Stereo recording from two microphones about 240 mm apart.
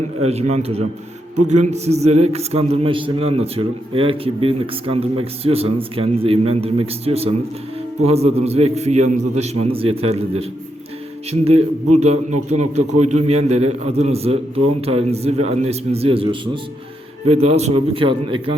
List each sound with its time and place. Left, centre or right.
0.2 s a man's voice: right
17.4 s a man's voice: right